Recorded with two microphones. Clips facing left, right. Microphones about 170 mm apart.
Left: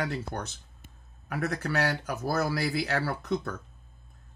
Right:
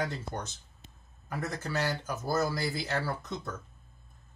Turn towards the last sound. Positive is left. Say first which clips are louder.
# left 5 dB
turn(degrees=65)  # may be behind; listen again after turning